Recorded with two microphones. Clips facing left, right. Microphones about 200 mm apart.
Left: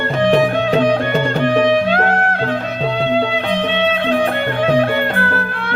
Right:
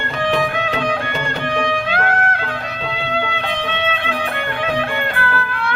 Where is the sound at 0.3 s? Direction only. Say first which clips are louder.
Left 5 dB; 40° left (ahead or behind).